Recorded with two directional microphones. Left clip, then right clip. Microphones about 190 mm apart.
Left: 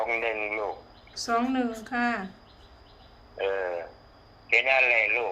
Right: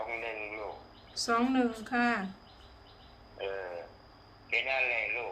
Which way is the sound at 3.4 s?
60° left (ahead or behind).